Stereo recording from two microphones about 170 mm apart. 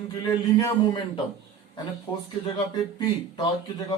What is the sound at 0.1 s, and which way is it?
Speech, 25° left (ahead or behind).